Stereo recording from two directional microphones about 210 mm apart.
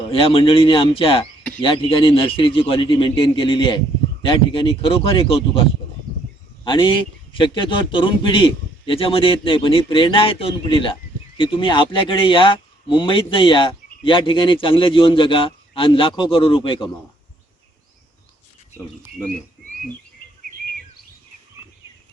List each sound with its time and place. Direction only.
0.1 s speech: 25° left (ahead or behind)
6.7 s speech: 25° left (ahead or behind)